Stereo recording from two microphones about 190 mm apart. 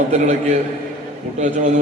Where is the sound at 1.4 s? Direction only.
35° right (ahead or behind).